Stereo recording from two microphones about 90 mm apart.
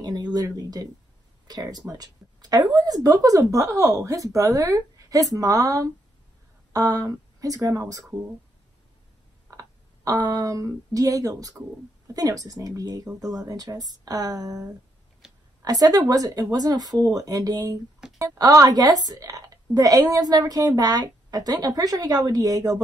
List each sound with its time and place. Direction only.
0.0 s a woman's voice: 50° right (ahead or behind)
9.5 s a woman's voice: 40° right (ahead or behind)
15.6 s a woman's voice: 45° right (ahead or behind)